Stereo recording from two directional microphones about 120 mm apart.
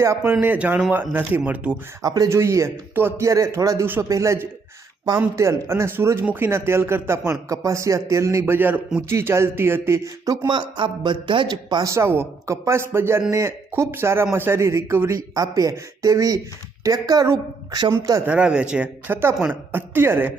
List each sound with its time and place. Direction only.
0.2 s speech: 15° right (ahead or behind)
2.0 s a man's voice: 30° right (ahead or behind)
10.4 s a man's voice: 40° right (ahead or behind)
17.9 s a man's voice: 25° right (ahead or behind)
18.3 s speech: 10° right (ahead or behind)